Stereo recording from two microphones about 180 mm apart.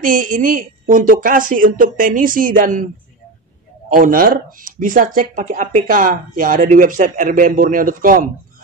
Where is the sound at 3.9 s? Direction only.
50° right (ahead or behind).